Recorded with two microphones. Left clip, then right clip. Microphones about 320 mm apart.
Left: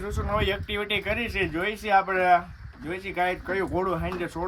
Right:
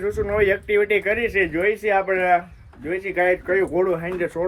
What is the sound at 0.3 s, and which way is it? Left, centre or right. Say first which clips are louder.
Speech: right 6 dB; centre.